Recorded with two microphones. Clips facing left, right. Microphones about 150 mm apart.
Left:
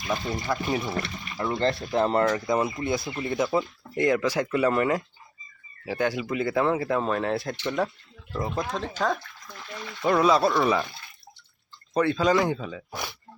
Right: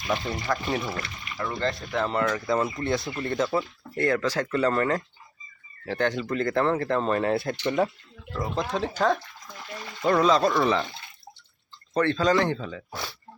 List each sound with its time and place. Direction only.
0.3 s speech: 10° left (ahead or behind)
1.4 s speech: 25° left (ahead or behind)
2.2 s speech: 20° left (ahead or behind); by 9.9 s 10° right (ahead or behind)
10.0 s speech: 10° left (ahead or behind)
11.9 s speech: 10° left (ahead or behind)